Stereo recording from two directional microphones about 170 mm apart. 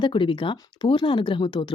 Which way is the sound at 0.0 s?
30° left (ahead or behind).